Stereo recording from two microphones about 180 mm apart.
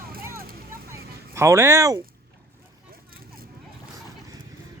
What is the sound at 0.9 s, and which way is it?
Fowl, 15° right (ahead or behind).